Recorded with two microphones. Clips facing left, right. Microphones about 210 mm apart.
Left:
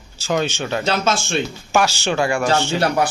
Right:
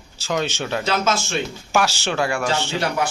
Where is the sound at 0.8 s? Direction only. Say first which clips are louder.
Left 1 dB; 30° left (ahead or behind).